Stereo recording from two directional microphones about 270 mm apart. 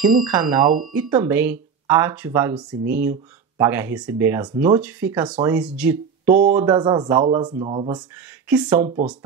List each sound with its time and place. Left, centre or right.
0.3 s speech: centre
8.5 s speech: centre